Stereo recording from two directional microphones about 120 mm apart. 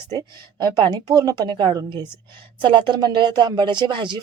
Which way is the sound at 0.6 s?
35° right (ahead or behind).